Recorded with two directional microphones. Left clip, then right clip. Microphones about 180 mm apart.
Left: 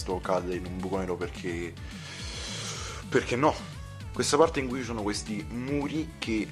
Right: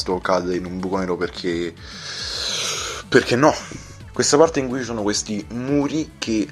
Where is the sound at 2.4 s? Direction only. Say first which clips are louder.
Right 14 dB; 30° right (ahead or behind).